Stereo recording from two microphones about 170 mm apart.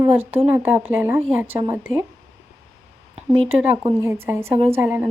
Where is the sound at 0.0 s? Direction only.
15° right (ahead or behind).